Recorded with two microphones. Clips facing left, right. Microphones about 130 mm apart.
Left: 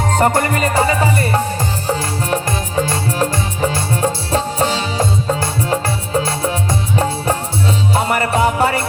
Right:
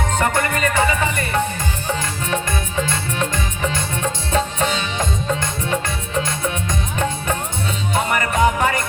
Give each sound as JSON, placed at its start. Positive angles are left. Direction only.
{"t": 0.1, "sound": "music", "side_deg": 35}